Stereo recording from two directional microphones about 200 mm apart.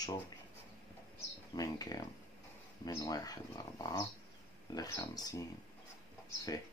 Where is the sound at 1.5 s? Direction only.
20° left (ahead or behind).